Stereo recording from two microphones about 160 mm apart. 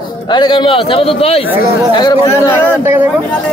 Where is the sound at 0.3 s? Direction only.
30° left (ahead or behind).